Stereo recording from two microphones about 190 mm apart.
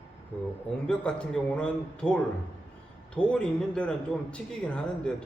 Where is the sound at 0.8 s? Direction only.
5° left (ahead or behind).